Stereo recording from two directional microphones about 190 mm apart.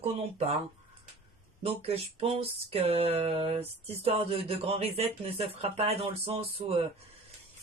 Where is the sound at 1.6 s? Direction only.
30° right (ahead or behind).